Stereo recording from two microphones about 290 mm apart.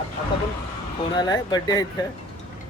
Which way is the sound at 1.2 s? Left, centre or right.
Centre.